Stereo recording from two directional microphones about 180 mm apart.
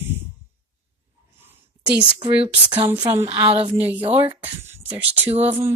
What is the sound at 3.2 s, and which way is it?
A woman's voice, 30° right (ahead or behind).